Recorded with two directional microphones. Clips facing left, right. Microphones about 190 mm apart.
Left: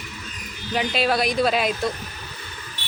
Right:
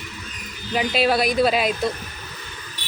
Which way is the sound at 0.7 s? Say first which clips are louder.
Right 2 dB; 5° right (ahead or behind).